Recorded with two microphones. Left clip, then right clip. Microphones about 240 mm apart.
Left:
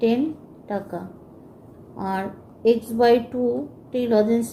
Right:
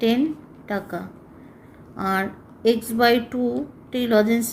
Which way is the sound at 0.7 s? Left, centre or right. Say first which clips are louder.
Right 1 dB; right.